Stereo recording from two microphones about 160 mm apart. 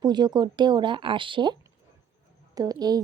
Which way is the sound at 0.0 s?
25° right (ahead or behind).